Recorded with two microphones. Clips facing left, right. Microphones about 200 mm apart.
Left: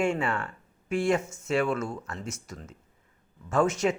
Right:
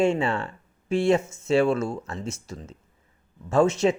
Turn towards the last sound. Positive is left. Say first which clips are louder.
# right 4 dB
turn(degrees=-25)  # may be behind; listen again after turning